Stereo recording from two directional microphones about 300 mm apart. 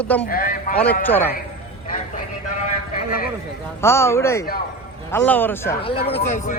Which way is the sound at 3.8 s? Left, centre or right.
Centre.